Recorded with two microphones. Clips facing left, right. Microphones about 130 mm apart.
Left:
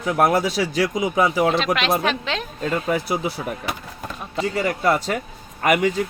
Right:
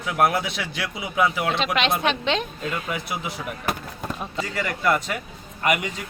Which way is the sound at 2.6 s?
40° left (ahead or behind).